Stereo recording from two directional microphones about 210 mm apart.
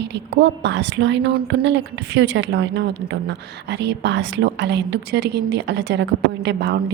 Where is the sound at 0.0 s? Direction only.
55° right (ahead or behind).